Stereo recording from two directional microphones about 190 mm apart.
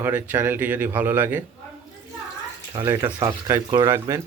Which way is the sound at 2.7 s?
20° right (ahead or behind).